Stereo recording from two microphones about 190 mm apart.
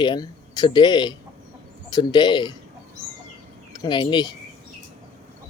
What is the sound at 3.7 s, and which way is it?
Speech, 25° left (ahead or behind).